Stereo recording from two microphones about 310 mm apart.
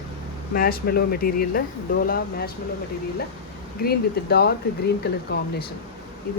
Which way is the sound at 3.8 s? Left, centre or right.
Left.